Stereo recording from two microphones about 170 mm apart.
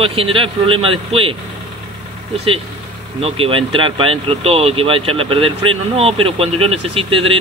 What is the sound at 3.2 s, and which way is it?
Speech, 35° right (ahead or behind).